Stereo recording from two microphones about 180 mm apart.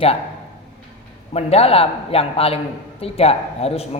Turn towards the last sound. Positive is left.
turn(degrees=35)  # may be behind; listen again after turning